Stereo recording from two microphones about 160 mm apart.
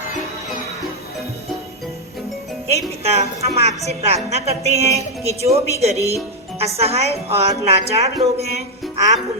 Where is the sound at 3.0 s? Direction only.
40° right (ahead or behind).